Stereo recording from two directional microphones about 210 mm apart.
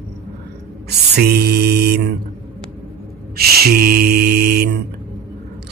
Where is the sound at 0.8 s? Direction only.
50° right (ahead or behind).